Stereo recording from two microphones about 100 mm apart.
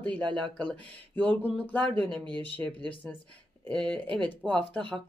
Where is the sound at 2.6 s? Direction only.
20° left (ahead or behind).